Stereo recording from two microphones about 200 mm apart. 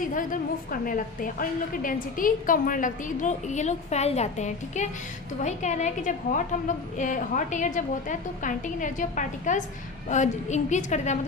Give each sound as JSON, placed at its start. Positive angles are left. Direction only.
{"t": 0.1, "sound": "a woman's voice", "side_deg": 40}